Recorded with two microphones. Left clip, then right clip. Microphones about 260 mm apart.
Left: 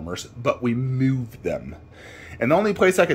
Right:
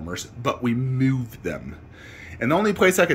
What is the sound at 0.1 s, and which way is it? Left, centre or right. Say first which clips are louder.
Speech: left 2 dB; centre.